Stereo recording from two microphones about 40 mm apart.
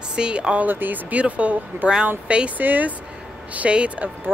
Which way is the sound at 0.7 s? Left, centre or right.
Right.